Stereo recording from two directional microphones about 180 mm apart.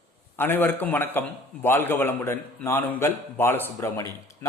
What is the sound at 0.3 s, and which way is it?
Speech, 10° left (ahead or behind).